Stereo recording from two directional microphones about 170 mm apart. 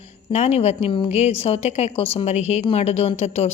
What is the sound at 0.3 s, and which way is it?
A woman's voice, 40° left (ahead or behind).